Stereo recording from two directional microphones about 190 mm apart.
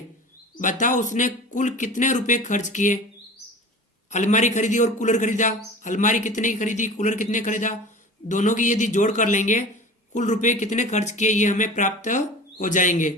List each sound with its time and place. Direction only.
0.6 s speech: 40° left (ahead or behind)
4.1 s speech: 40° left (ahead or behind)